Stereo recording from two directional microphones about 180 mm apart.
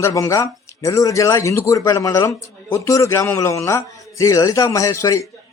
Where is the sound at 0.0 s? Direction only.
15° left (ahead or behind).